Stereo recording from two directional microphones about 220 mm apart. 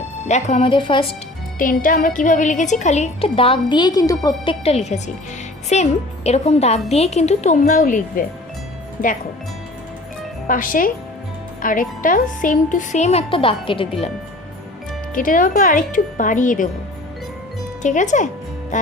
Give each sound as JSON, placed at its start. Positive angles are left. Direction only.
{"t": 0.3, "sound": "speech", "side_deg": 30}
{"t": 1.5, "sound": "a woman's voice", "side_deg": 40}
{"t": 10.4, "sound": "a woman's voice", "side_deg": 40}
{"t": 15.1, "sound": "a woman's voice", "side_deg": 40}
{"t": 17.8, "sound": "a woman's voice", "side_deg": 35}